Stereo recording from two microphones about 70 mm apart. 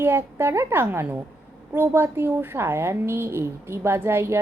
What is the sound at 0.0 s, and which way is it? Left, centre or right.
A woman's voice, right.